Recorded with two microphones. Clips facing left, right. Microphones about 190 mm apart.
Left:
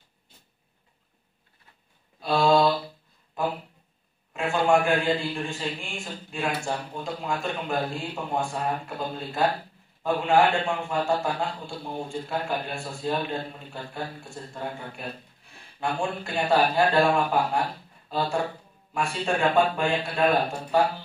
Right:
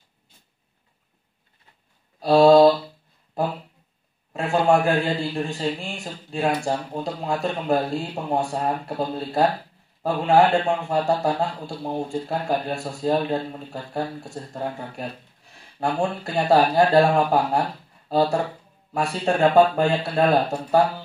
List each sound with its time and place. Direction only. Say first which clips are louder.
2.1 s mantra: right 8 dB; 40° right (ahead or behind)
4.3 s a man's voice: right 3 dB; 35° right (ahead or behind)